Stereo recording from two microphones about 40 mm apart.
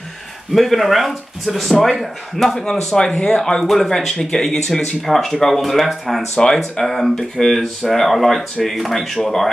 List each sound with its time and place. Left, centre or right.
0.6 s speech: centre
2.6 s speech: centre
6.3 s speech: centre